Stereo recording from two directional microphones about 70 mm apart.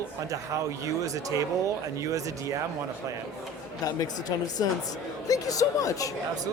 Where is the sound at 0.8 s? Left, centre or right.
Right.